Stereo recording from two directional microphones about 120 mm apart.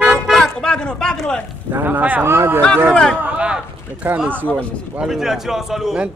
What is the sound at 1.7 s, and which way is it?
Speech, 15° right (ahead or behind).